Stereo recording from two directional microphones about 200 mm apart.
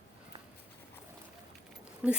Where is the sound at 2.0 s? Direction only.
5° right (ahead or behind).